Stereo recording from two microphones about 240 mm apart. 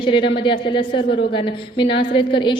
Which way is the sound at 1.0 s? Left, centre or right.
Left.